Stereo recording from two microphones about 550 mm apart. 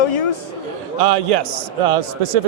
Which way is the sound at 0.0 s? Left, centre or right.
Left.